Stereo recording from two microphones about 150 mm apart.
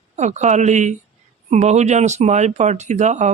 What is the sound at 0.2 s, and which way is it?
A woman's voice, 50° right (ahead or behind).